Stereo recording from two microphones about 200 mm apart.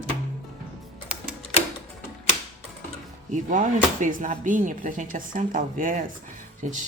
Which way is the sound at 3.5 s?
40° right (ahead or behind).